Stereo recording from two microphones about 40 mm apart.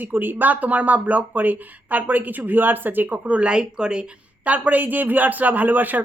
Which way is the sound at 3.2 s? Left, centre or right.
Right.